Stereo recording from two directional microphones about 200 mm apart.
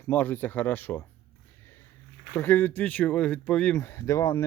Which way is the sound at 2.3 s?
10° left (ahead or behind).